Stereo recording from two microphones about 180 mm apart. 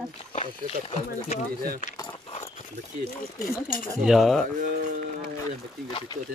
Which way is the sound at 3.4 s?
55° left (ahead or behind).